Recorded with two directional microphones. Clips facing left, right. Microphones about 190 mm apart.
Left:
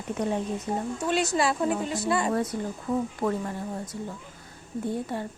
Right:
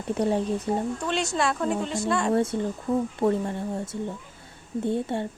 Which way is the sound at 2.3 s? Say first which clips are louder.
Right 4 dB; 25° right (ahead or behind).